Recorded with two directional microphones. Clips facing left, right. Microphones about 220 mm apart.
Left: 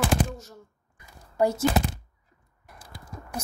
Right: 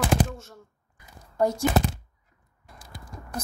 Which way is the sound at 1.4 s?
10° left (ahead or behind).